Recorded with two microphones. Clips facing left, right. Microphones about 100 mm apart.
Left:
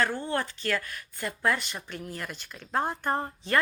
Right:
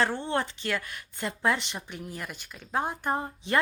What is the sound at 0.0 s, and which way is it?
A woman's voice, 25° right (ahead or behind).